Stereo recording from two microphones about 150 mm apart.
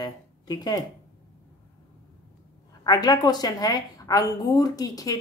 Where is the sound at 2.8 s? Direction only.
25° left (ahead or behind).